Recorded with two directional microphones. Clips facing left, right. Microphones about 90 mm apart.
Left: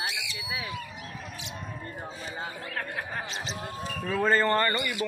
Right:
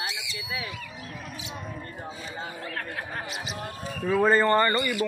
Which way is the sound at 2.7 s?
10° left (ahead or behind).